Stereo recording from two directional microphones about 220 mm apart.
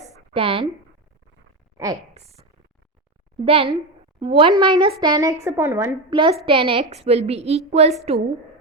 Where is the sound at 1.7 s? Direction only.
15° right (ahead or behind).